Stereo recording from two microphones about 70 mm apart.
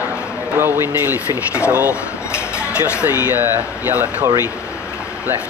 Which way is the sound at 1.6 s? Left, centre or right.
Centre.